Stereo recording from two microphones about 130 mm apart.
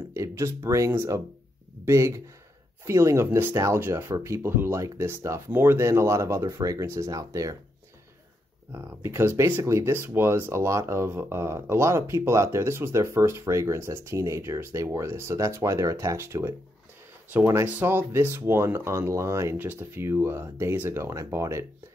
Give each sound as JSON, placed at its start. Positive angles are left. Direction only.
{"t": 0.1, "sound": "speech", "side_deg": -25}
{"t": 8.7, "sound": "speech", "side_deg": -20}